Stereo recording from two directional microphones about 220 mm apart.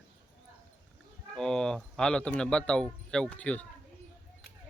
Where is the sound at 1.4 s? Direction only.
5° left (ahead or behind).